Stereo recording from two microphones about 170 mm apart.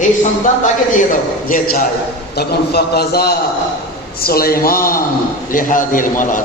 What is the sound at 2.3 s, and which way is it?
A man's voice, 70° left (ahead or behind).